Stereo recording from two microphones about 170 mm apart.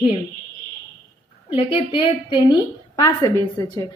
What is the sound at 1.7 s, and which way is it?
A woman's voice, 35° left (ahead or behind).